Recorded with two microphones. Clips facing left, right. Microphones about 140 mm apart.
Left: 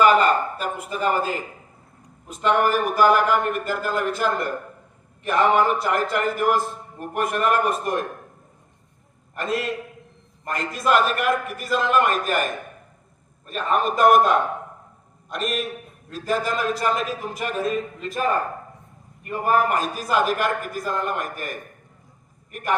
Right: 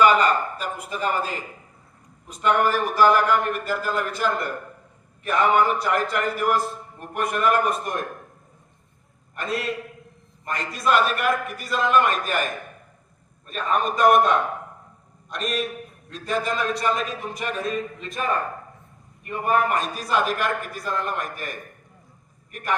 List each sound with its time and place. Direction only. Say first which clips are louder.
0.0 s speech: left 1 dB; centre (ahead or behind)
2.2 s a man's voice: left 1 dB; centre (ahead or behind)
2.6 s a man's voice: left 1 dB; 10° left (ahead or behind)
9.3 s a man's voice: left 2 dB; centre (ahead or behind)
13.5 s a man's voice: left 2 dB; centre (ahead or behind)
19.3 s a man's voice: left 1 dB; centre (ahead or behind)